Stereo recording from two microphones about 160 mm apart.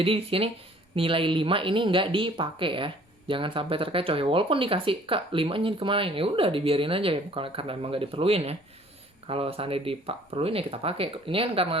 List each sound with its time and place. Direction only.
0.0 s speech: 35° right (ahead or behind)